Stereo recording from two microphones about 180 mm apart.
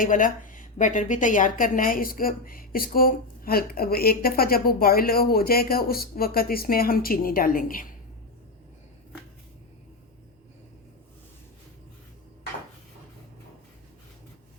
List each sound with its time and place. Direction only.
0.0 s a woman's voice: 45° left (ahead or behind)